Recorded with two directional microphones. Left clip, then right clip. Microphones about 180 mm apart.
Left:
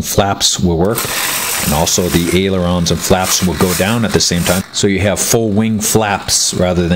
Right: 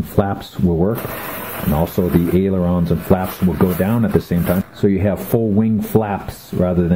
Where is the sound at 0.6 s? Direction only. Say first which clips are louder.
Left 4 dB; 35° left (ahead or behind).